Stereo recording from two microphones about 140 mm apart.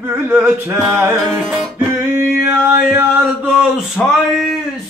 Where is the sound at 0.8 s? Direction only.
15° right (ahead or behind).